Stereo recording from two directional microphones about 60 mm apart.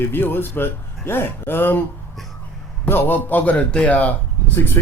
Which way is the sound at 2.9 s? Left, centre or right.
Left.